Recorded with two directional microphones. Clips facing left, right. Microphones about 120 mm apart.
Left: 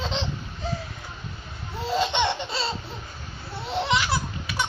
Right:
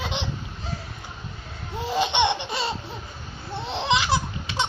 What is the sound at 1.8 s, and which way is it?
Laughter, 20° right (ahead or behind).